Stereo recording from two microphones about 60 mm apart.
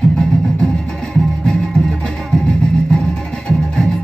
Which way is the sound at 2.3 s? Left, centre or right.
Centre.